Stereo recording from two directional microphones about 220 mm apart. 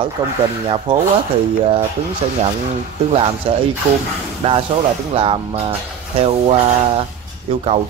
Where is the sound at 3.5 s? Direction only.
25° right (ahead or behind).